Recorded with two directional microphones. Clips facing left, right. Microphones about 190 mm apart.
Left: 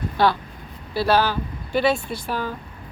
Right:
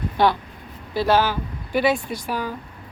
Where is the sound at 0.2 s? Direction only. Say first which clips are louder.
Right 1 dB; 20° right (ahead or behind).